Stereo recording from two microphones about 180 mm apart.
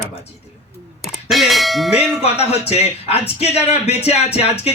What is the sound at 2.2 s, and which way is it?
Speech, 35° left (ahead or behind).